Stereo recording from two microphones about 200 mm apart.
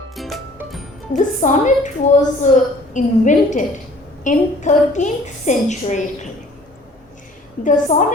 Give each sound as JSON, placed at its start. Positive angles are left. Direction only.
{"t": 0.2, "sound": "music", "side_deg": 0}
{"t": 1.1, "sound": "a woman's voice", "side_deg": 40}
{"t": 7.6, "sound": "a woman's voice", "side_deg": 40}